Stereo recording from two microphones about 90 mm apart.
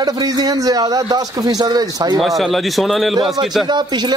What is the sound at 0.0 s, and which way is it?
A man's voice, 45° right (ahead or behind).